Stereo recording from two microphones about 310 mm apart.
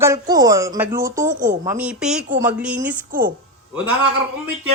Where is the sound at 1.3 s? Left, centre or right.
Right.